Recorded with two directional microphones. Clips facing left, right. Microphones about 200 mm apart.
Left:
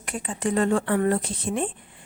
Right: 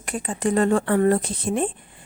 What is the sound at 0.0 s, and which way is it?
A woman's voice, 40° right (ahead or behind).